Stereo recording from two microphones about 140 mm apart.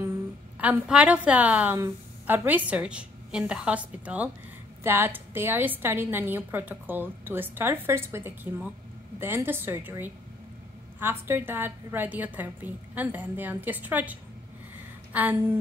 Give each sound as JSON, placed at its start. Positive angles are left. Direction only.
{"t": 0.6, "sound": "a woman's voice", "side_deg": -10}
{"t": 15.1, "sound": "a woman's voice", "side_deg": -10}